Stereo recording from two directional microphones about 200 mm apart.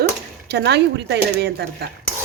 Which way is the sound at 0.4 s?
55° right (ahead or behind).